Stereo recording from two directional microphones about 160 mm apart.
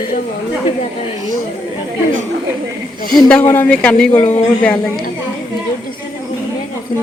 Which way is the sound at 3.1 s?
5° left (ahead or behind).